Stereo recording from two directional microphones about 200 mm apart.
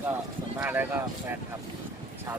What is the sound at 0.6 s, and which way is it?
Speech, 10° right (ahead or behind).